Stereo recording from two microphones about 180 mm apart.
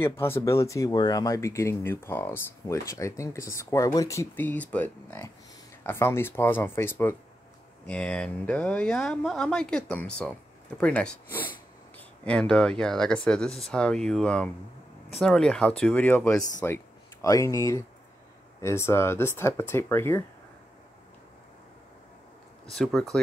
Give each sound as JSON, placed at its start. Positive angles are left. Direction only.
{"t": 0.0, "sound": "speech", "side_deg": 15}
{"t": 22.7, "sound": "speech", "side_deg": 0}